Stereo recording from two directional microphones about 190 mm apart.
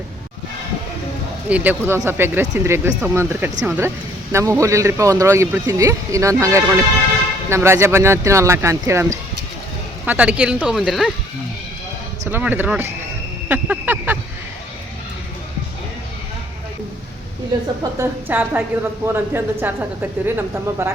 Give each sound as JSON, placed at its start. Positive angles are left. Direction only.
{"t": 1.5, "sound": "speech", "side_deg": -10}
{"t": 12.3, "sound": "speech", "side_deg": -10}
{"t": 18.0, "sound": "speech", "side_deg": -10}